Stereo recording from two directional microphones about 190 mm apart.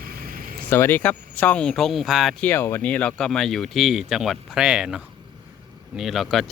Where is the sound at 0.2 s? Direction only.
50° right (ahead or behind).